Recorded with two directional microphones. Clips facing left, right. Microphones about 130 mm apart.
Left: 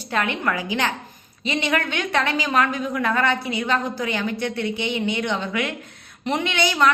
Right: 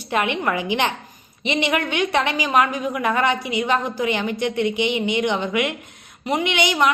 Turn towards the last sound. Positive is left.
turn(degrees=-15)  # may be behind; listen again after turning